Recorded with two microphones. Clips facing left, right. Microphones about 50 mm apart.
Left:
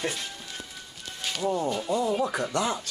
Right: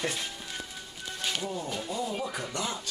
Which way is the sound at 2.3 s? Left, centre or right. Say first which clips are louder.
Left 7 dB; left.